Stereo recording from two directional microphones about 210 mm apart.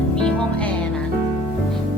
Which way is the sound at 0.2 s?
5° left (ahead or behind).